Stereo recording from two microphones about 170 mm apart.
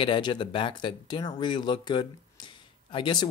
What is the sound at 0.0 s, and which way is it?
Speech, 30° left (ahead or behind).